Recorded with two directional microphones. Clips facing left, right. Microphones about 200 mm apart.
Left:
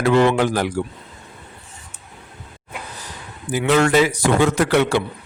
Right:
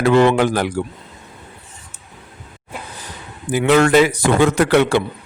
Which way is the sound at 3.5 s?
60° right (ahead or behind).